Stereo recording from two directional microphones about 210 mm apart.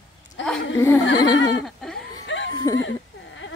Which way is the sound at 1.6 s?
Centre (ahead or behind).